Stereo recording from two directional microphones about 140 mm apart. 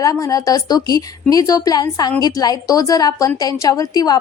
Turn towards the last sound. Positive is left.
turn(degrees=25)  # may be behind; listen again after turning